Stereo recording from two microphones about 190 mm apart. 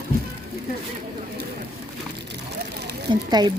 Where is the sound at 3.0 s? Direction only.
20° right (ahead or behind).